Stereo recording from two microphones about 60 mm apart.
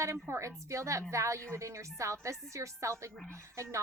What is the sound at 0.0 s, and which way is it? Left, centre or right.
Speech, right.